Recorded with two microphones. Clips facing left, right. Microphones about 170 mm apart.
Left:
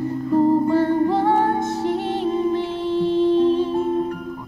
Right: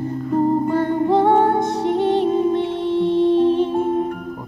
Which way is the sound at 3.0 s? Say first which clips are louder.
Right 1 dB; 20° right (ahead or behind).